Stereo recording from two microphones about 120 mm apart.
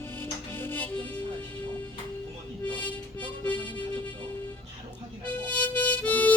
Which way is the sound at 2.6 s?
15° left (ahead or behind).